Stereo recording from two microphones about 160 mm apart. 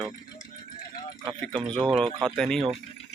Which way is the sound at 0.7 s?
70° left (ahead or behind).